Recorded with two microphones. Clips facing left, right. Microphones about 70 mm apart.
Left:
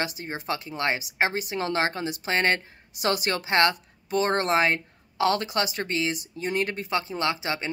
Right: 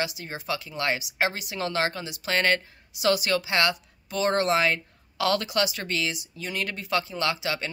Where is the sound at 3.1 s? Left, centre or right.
Left.